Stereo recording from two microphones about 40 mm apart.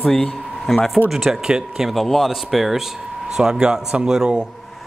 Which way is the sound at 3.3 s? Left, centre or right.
Centre.